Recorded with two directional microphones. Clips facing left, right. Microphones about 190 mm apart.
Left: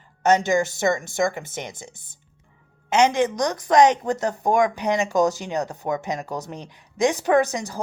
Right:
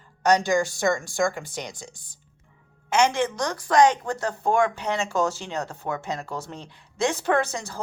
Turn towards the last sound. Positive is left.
turn(degrees=15)  # may be behind; listen again after turning